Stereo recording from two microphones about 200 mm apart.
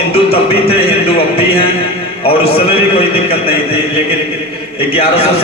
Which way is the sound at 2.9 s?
30° left (ahead or behind).